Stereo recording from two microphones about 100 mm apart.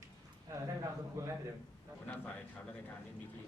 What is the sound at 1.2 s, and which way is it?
Speech, 30° right (ahead or behind).